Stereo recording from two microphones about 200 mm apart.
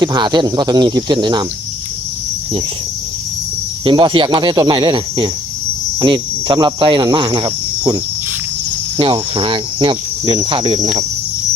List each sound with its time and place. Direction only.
0.0 s cricket: 20° right (ahead or behind)
3.8 s cricket: 25° right (ahead or behind)